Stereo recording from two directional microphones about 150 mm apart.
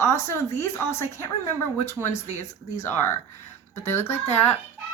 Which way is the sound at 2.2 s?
50° left (ahead or behind).